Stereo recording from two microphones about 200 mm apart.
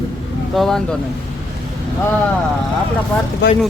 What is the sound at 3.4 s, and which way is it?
Speech, 60° left (ahead or behind).